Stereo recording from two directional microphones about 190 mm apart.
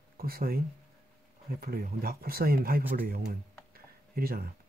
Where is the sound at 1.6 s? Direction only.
50° right (ahead or behind).